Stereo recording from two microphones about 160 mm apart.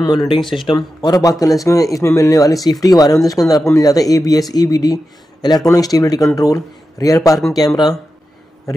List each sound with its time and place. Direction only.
0.0 s speech: 25° left (ahead or behind)